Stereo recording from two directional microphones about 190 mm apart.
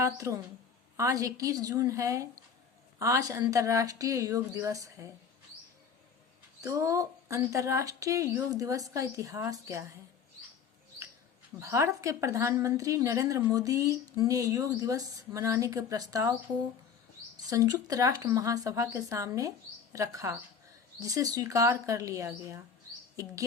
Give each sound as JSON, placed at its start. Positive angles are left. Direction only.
{"t": 0.0, "sound": "a woman's voice", "side_deg": -15}
{"t": 6.6, "sound": "a woman's voice", "side_deg": -15}
{"t": 11.6, "sound": "a woman's voice", "side_deg": -15}
{"t": 17.4, "sound": "a woman's voice", "side_deg": -20}